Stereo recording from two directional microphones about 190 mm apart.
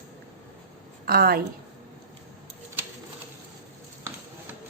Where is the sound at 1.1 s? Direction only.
50° right (ahead or behind).